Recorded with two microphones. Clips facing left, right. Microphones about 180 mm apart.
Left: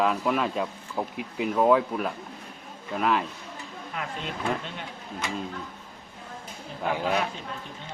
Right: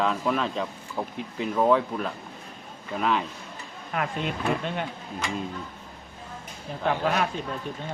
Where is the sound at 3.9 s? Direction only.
65° right (ahead or behind).